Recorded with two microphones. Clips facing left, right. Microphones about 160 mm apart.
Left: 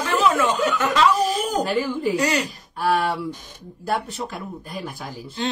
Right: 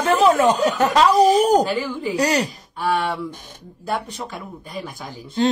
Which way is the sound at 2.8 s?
Centre (ahead or behind).